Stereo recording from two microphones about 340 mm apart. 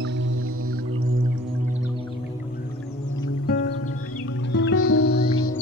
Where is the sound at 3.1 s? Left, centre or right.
Left.